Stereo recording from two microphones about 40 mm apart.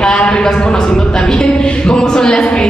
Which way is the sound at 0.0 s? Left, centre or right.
Left.